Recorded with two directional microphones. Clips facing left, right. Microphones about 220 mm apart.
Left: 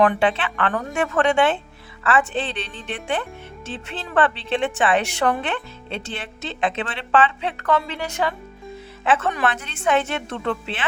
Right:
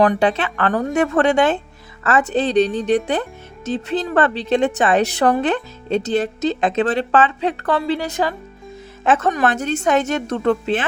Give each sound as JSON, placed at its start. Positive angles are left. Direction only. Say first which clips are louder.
{"t": 0.0, "sound": "a woman's voice", "louder": "right 3 dB", "side_deg": -40}